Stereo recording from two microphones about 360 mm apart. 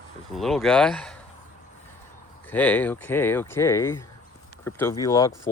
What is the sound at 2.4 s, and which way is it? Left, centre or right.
Speech, centre.